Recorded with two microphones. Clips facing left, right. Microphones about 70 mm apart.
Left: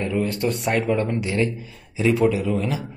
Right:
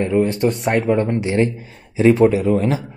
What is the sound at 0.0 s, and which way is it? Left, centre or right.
Speech, right.